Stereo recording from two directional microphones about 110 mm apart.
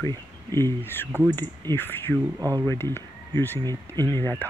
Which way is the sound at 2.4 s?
35° right (ahead or behind).